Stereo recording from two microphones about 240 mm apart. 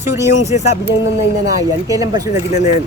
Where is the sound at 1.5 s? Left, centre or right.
Centre.